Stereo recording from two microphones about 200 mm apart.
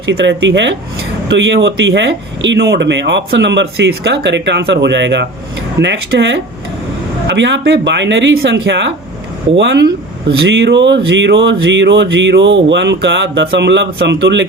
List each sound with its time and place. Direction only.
0.0 s speech: 65° right (ahead or behind)